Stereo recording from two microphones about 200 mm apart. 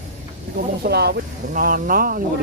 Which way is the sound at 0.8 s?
55° right (ahead or behind).